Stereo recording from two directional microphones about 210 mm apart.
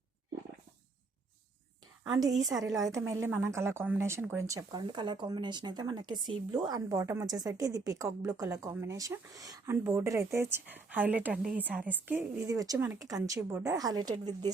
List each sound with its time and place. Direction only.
2.0 s speech: 15° right (ahead or behind)